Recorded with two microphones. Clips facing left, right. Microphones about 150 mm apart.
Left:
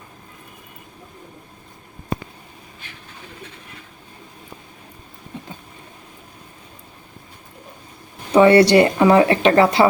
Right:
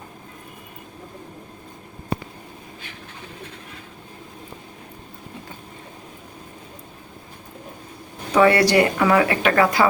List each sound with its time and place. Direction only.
8.3 s speech: 25° left (ahead or behind)